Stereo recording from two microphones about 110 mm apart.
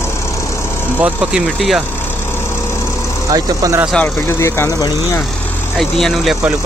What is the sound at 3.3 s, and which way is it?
Speech, 30° right (ahead or behind).